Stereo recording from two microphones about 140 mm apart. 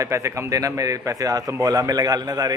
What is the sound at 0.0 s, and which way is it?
A man's voice, 20° right (ahead or behind).